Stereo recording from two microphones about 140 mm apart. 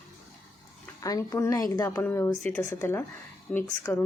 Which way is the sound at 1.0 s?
25° left (ahead or behind).